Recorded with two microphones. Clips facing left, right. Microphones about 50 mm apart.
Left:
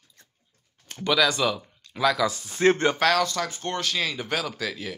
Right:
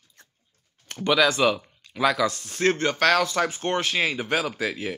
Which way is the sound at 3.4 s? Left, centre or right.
Right.